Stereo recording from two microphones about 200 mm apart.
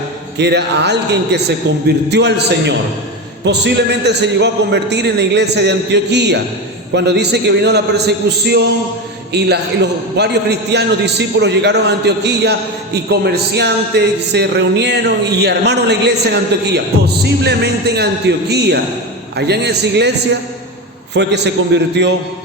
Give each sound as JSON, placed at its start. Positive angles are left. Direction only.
{"t": 0.3, "sound": "a man's voice", "side_deg": -60}